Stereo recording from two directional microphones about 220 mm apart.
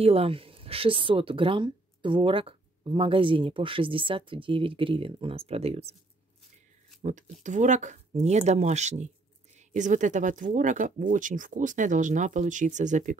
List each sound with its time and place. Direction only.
0.0 s speech: 25° right (ahead or behind)
7.0 s speech: 35° right (ahead or behind)